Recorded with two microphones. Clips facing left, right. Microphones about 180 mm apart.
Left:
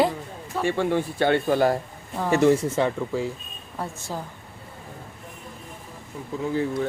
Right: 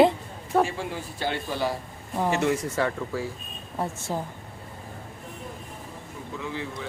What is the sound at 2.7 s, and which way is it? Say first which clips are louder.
Speech: left 3 dB; 20° left (ahead or behind).